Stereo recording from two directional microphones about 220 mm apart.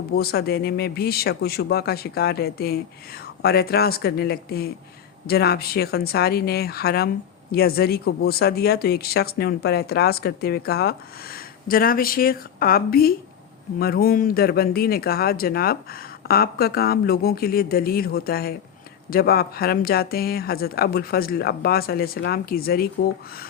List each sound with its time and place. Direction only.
0.2 s speech: 45° left (ahead or behind)